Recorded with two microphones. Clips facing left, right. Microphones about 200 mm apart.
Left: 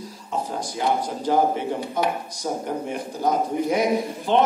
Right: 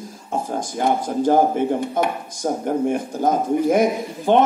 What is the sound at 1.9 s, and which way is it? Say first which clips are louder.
Speech: right 2 dB; 50° right (ahead or behind).